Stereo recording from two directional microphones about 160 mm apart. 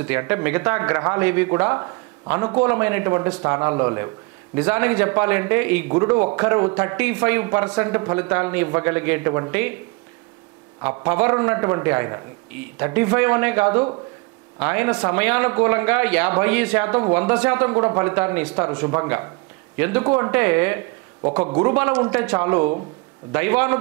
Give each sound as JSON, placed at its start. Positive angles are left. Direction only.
{"t": 0.0, "sound": "speech", "side_deg": -10}
{"t": 10.8, "sound": "speech", "side_deg": -10}